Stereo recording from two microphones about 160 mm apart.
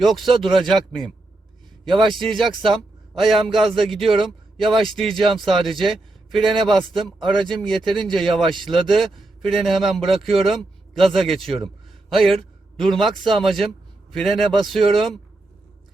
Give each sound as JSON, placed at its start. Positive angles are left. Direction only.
{"t": 0.3, "sound": "speech", "side_deg": 0}
{"t": 2.1, "sound": "a man's voice", "side_deg": 0}
{"t": 7.9, "sound": "speech", "side_deg": -30}
{"t": 8.1, "sound": "a man's voice", "side_deg": 0}